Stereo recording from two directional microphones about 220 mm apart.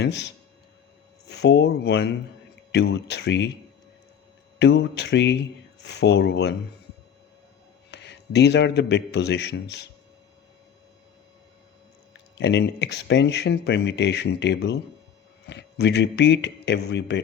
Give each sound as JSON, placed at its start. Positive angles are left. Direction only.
{"t": 0.0, "sound": "speech", "side_deg": 50}
{"t": 1.3, "sound": "speech", "side_deg": 50}
{"t": 4.6, "sound": "speech", "side_deg": 55}
{"t": 7.9, "sound": "speech", "side_deg": 50}
{"t": 12.4, "sound": "speech", "side_deg": 55}